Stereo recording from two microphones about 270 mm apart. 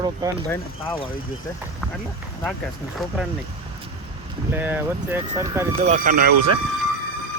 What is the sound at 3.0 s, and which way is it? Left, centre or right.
Speech, centre.